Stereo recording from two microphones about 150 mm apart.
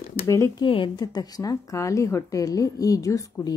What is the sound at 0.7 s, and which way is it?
Speech, 35° left (ahead or behind).